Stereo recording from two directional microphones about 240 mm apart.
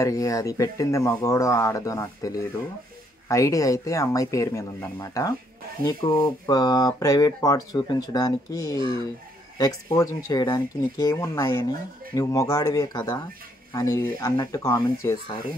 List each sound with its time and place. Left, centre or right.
0.0 s speech: centre